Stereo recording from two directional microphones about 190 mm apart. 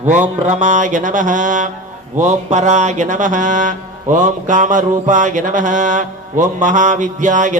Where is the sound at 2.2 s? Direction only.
40° right (ahead or behind).